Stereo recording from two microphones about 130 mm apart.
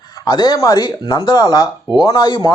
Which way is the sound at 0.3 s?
30° left (ahead or behind).